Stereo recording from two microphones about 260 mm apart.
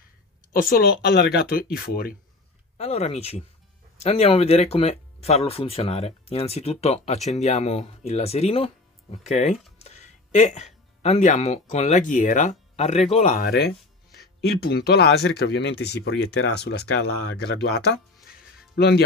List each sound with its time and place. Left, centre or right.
0.5 s speech: left
2.8 s speech: left